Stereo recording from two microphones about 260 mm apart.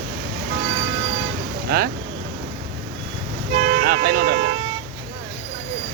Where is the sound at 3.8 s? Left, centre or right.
Right.